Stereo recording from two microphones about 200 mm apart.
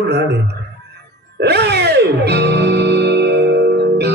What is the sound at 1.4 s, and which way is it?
Music, 55° right (ahead or behind).